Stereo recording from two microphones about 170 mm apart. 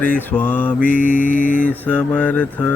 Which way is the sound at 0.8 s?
50° left (ahead or behind).